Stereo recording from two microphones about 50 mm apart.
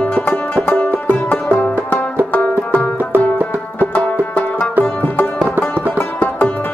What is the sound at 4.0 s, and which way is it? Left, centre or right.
Music, centre.